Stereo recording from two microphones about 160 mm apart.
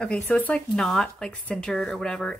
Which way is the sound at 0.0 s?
5° left (ahead or behind).